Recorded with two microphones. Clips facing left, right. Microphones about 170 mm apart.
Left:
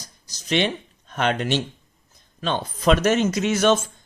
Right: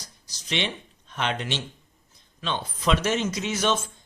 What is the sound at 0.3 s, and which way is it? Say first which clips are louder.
A man's voice: left 7 dB; 50° left (ahead or behind).